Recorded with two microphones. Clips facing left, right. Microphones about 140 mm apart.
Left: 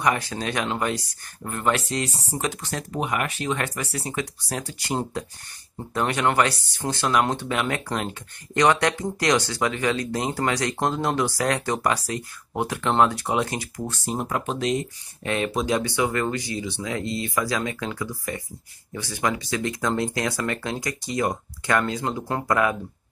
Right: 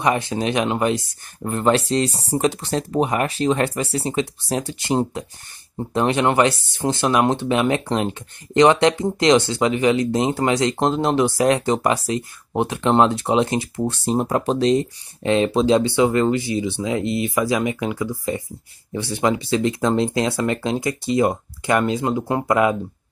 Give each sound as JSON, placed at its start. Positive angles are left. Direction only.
{"t": 0.0, "sound": "speech", "side_deg": -20}